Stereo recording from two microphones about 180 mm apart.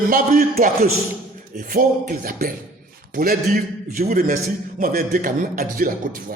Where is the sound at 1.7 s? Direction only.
50° right (ahead or behind).